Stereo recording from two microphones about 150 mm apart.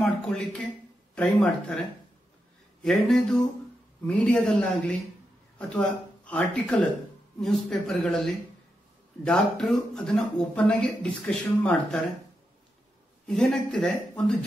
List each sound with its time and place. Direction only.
0.0 s speech: 5° left (ahead or behind)
2.8 s speech: 5° left (ahead or behind)
9.2 s speech: 5° left (ahead or behind)
13.3 s speech: 5° left (ahead or behind)